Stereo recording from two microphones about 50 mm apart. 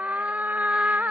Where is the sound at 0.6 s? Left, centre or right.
Centre.